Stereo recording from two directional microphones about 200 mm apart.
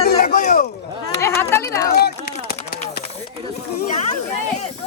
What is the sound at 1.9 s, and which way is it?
Speech, 55° left (ahead or behind).